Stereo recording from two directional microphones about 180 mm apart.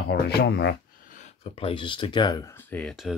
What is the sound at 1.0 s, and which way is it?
Speech, 40° left (ahead or behind).